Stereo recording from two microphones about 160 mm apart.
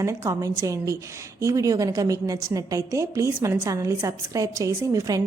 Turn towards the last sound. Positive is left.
turn(degrees=-20)  # may be behind; listen again after turning